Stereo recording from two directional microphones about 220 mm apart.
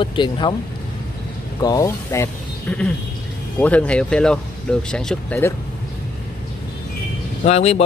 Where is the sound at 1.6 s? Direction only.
15° left (ahead or behind).